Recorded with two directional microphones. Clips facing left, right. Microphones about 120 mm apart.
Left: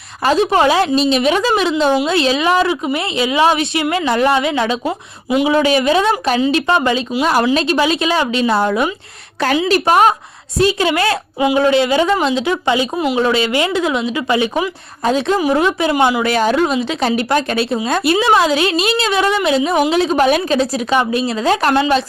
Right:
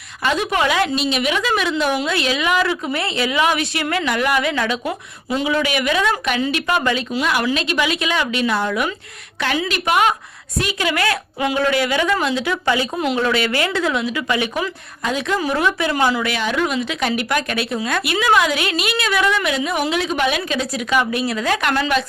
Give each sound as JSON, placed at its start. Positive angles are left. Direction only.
{"t": 0.2, "sound": "a woman's voice", "side_deg": 35}
{"t": 4.9, "sound": "speech", "side_deg": 15}
{"t": 5.5, "sound": "a woman's voice", "side_deg": 30}
{"t": 7.2, "sound": "a woman's voice", "side_deg": 40}
{"t": 16.2, "sound": "a woman's voice", "side_deg": 40}